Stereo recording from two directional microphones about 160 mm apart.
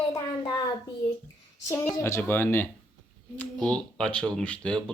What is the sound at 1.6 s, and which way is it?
Speech, 15° left (ahead or behind).